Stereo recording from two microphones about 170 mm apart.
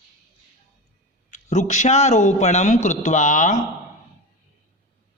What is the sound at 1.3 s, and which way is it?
Speech, 45° left (ahead or behind).